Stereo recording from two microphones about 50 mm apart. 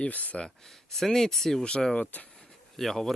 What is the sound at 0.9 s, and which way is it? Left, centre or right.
Speech, centre.